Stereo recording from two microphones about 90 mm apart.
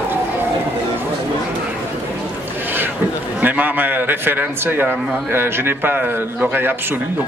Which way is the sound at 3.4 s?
20° right (ahead or behind).